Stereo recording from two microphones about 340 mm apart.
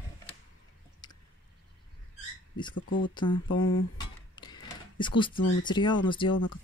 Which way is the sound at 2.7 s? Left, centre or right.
Left.